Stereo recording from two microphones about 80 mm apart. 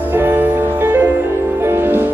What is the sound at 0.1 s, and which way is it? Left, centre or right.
Music, right.